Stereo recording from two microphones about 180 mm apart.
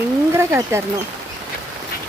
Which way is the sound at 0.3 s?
15° right (ahead or behind).